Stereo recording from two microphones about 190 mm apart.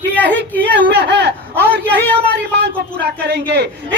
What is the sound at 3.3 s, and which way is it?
Speech, 60° right (ahead or behind).